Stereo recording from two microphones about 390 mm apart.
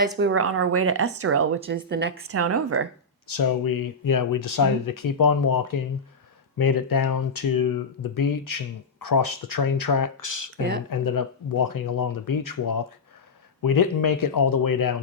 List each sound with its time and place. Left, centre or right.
0.2 s a woman's voice: right
3.3 s speech: left